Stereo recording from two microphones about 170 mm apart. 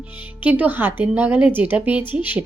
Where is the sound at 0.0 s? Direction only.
10° right (ahead or behind).